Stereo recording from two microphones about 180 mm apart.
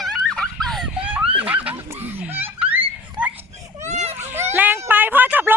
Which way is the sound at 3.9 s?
40° right (ahead or behind).